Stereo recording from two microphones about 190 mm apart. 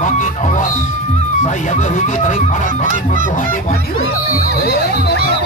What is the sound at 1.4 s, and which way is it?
Honk, 40° left (ahead or behind).